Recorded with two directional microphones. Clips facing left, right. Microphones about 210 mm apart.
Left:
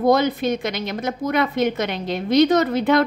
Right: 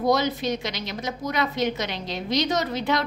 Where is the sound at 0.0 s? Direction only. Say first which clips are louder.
Left 5 dB; 55° left (ahead or behind).